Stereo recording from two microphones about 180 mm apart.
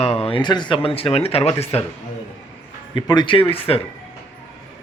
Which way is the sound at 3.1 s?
25° left (ahead or behind).